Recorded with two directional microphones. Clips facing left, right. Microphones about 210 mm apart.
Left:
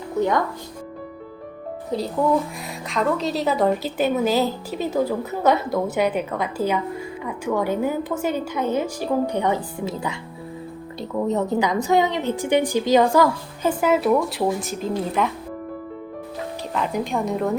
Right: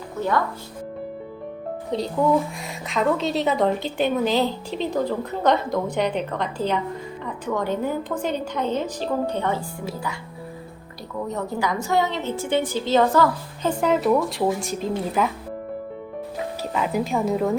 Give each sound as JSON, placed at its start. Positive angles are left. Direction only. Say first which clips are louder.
{"t": 1.9, "sound": "a woman's voice", "louder": "even", "side_deg": 0}
{"t": 11.3, "sound": "a woman's voice", "louder": "left 4 dB", "side_deg": 20}
{"t": 16.7, "sound": "a woman's voice", "louder": "right 1 dB", "side_deg": -5}